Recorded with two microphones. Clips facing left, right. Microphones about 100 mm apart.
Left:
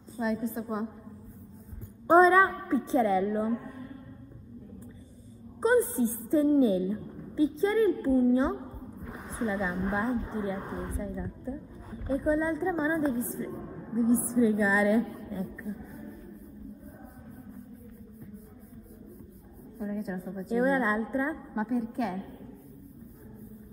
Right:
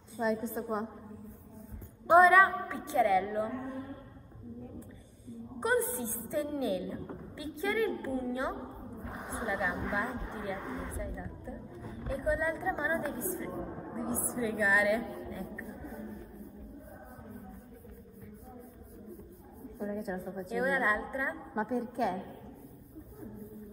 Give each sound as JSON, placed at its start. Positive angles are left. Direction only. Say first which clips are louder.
{"t": 0.2, "sound": "a woman's voice", "louder": "left 1 dB", "side_deg": 0}
{"t": 2.0, "sound": "a woman's voice", "louder": "left 2 dB", "side_deg": 30}
{"t": 5.6, "sound": "a woman's voice", "louder": "left 7 dB", "side_deg": 30}
{"t": 9.0, "sound": "a sound", "louder": "right 1 dB", "side_deg": 0}
{"t": 9.5, "sound": "a woman's voice", "louder": "left 2 dB", "side_deg": 25}
{"t": 11.2, "sound": "a sound", "louder": "left 6 dB", "side_deg": 35}
{"t": 12.2, "sound": "a woman's voice", "louder": "left 4 dB", "side_deg": 30}
{"t": 15.4, "sound": "a sound", "louder": "left 4 dB", "side_deg": 0}
{"t": 19.8, "sound": "a woman's voice", "louder": "left 2 dB", "side_deg": 0}
{"t": 20.4, "sound": "a woman's voice", "louder": "left 5 dB", "side_deg": 30}
{"t": 21.5, "sound": "a woman's voice", "louder": "left 1 dB", "side_deg": 0}